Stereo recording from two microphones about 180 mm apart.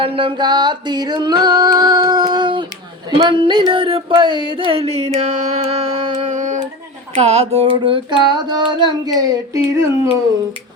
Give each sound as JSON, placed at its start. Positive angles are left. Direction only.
{"t": 0.0, "sound": "music", "side_deg": -30}
{"t": 3.7, "sound": "carnatic music", "side_deg": -30}
{"t": 7.2, "sound": "music", "side_deg": -35}
{"t": 9.1, "sound": "child singing", "side_deg": -15}